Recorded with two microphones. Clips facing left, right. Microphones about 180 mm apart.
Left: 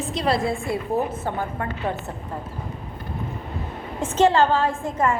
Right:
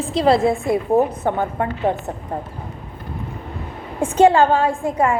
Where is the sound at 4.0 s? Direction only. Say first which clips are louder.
Right 5 dB; 15° right (ahead or behind).